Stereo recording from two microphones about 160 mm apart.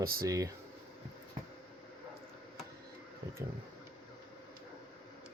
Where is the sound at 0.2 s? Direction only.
20° right (ahead or behind).